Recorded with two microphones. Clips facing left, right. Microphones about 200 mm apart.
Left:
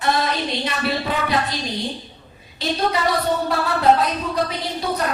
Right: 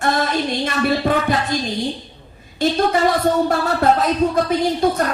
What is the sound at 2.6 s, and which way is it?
Speech, 50° right (ahead or behind).